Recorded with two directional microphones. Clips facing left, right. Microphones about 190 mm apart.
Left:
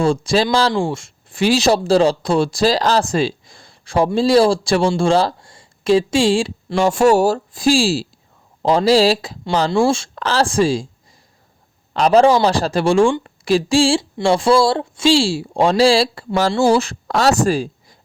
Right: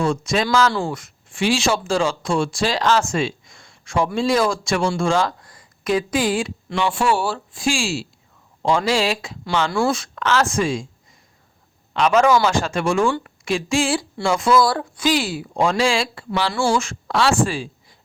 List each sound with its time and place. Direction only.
0.0 s speech: 30° left (ahead or behind)
6.7 s speech: 40° left (ahead or behind)
11.9 s a woman's voice: 35° left (ahead or behind)